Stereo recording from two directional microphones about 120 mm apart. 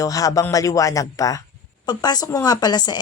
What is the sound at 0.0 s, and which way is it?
Speech, 30° left (ahead or behind).